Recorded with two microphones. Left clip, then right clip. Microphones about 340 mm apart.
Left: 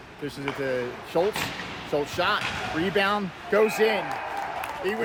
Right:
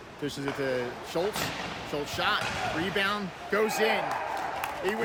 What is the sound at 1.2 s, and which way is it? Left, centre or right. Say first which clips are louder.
Speech: left 5 dB; centre.